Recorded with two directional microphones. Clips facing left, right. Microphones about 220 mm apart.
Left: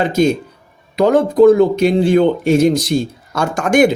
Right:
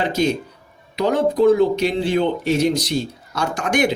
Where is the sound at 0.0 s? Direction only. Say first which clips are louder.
Left 5 dB; 50° left (ahead or behind).